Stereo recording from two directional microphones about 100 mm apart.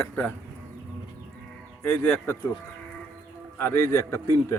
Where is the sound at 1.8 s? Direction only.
25° left (ahead or behind).